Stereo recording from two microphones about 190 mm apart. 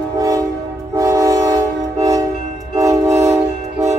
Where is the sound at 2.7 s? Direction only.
15° right (ahead or behind).